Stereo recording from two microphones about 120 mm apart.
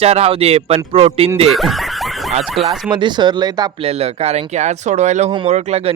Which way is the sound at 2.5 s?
Centre (ahead or behind).